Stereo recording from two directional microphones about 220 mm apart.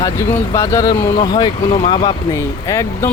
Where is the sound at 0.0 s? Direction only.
10° left (ahead or behind).